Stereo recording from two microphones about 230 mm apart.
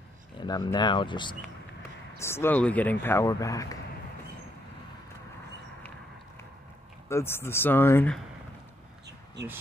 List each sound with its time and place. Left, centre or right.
0.5 s speech: centre
7.1 s speech: centre
9.0 s a sound: right